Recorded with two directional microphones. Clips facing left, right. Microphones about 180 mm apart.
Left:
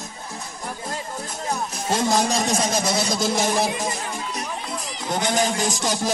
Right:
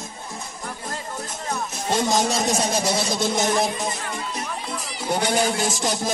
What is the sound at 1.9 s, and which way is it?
Speech, centre (ahead or behind).